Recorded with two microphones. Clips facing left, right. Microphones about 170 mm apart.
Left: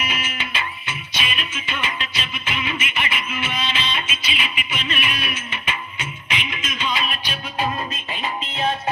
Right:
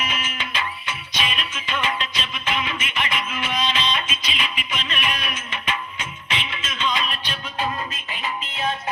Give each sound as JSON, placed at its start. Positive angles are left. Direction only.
{"t": 0.0, "sound": "music", "side_deg": 10}
{"t": 8.2, "sound": "music", "side_deg": 30}